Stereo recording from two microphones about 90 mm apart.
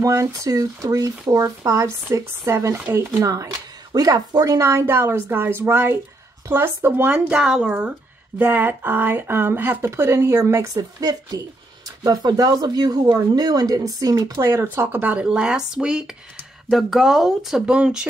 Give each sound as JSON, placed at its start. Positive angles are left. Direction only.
{"t": 0.0, "sound": "speech", "side_deg": -35}
{"t": 7.2, "sound": "speech", "side_deg": -5}
{"t": 8.4, "sound": "speech", "side_deg": -20}
{"t": 10.7, "sound": "speech", "side_deg": -45}